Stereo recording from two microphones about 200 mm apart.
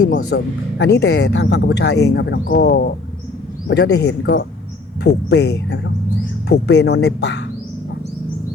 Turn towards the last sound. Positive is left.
turn(degrees=60)  # may be behind; listen again after turning